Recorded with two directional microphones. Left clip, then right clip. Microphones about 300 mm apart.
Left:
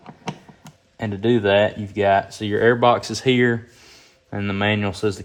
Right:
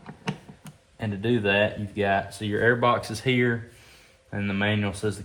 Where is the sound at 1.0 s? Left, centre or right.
Left.